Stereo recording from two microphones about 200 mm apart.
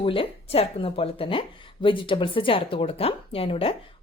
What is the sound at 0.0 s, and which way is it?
Speech, 25° left (ahead or behind).